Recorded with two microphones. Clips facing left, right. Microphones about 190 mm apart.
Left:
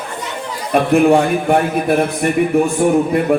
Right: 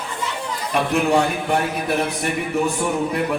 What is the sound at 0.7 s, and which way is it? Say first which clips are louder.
A man's voice: left 7 dB; 50° left (ahead or behind).